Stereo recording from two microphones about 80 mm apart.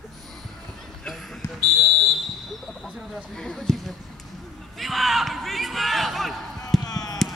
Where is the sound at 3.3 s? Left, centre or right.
Centre.